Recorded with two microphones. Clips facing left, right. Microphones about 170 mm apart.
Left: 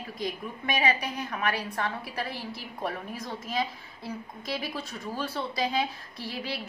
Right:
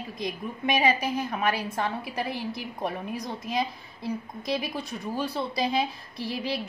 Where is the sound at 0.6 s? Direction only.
20° right (ahead or behind).